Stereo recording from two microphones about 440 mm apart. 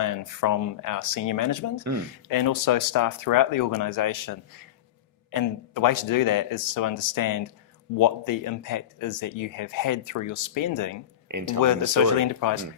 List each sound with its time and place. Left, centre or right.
0.0 s speech: left
11.3 s speech: right
12.1 s speech: left